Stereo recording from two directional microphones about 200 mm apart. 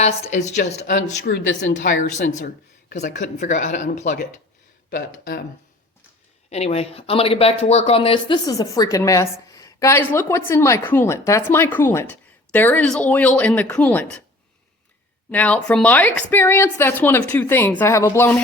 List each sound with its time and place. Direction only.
0.0 s speech: 35° left (ahead or behind)
1.3 s a woman's voice: 65° left (ahead or behind)
1.7 s speech: 40° left (ahead or behind)
6.5 s speech: 30° left (ahead or behind); by 14.3 s 10° left (ahead or behind)
15.3 s speech: 5° left (ahead or behind)